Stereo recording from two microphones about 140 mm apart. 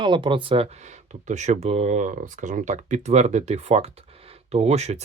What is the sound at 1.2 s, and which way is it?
Speech, 55° right (ahead or behind).